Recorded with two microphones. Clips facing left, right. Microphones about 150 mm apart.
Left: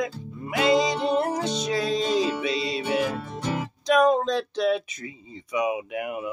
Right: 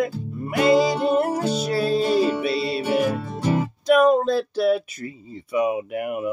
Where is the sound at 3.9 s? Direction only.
5° right (ahead or behind).